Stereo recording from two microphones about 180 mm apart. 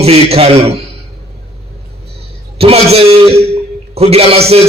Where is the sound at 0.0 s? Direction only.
35° right (ahead or behind).